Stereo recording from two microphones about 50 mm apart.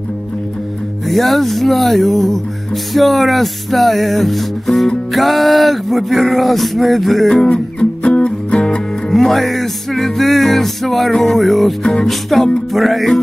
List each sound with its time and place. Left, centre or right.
1.0 s speech: centre
7.4 s music: left
9.1 s music: centre
11.8 s music: centre
12.1 s speech: centre